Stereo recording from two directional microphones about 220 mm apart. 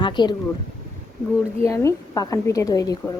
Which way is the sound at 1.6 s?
15° left (ahead or behind).